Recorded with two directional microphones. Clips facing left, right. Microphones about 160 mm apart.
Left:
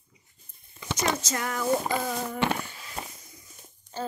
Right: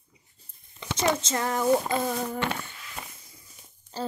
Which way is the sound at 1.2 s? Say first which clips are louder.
Right 3 dB; 30° right (ahead or behind).